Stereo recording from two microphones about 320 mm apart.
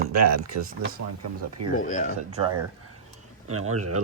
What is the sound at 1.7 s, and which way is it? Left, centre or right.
Speech, left.